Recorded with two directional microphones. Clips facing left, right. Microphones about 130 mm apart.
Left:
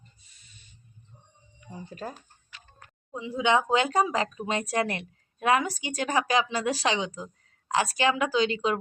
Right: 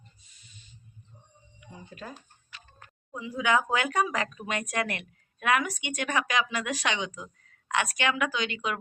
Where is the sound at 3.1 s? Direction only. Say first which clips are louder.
Left 2 dB; 25° left (ahead or behind).